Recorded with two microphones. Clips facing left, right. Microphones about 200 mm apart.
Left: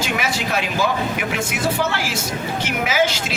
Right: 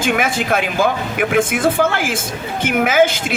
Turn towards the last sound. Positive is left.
turn(degrees=-50)  # may be behind; listen again after turning